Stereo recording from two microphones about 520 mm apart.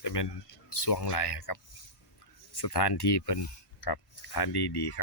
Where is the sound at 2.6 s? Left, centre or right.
Left.